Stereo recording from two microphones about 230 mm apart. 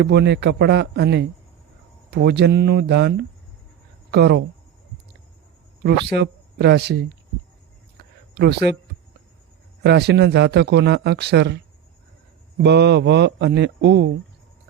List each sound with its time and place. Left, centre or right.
0.0 s a man's voice: right
5.8 s speech: right
7.9 s a sound: right
9.8 s a man's voice: right
12.6 s a man's voice: right